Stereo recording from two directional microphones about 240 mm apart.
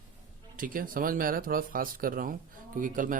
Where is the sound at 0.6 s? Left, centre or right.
Right.